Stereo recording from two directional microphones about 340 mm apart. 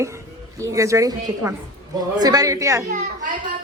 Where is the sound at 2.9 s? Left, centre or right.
Right.